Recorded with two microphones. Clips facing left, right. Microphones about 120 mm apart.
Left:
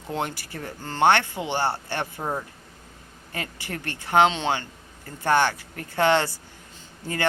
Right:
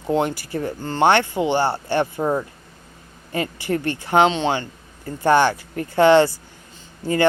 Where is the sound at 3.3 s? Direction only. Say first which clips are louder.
Right 10 dB; 20° right (ahead or behind).